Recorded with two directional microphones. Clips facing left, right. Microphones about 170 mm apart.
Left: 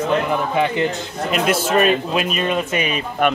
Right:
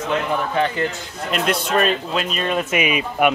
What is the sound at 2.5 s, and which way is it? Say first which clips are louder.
Speech: right 1 dB; 5° right (ahead or behind).